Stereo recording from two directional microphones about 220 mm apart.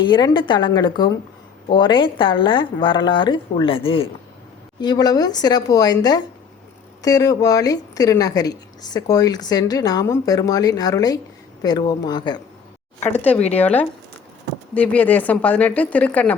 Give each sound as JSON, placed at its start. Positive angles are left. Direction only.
{"t": 0.0, "sound": "a woman's voice", "side_deg": 20}
{"t": 13.1, "sound": "speech", "side_deg": 5}